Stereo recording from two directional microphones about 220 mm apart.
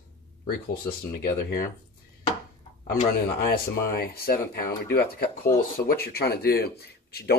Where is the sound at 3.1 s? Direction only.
45° left (ahead or behind).